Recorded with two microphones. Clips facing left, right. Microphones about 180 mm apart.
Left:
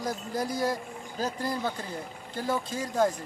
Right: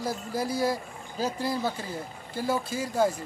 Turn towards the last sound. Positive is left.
turn(degrees=-10)  # may be behind; listen again after turning